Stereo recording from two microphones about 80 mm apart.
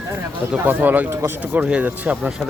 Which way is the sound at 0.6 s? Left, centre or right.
Right.